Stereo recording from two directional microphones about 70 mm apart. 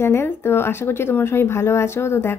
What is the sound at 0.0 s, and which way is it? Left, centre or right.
Speech, left.